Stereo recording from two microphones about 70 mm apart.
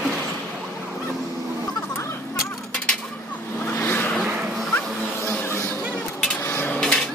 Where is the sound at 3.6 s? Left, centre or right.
Left.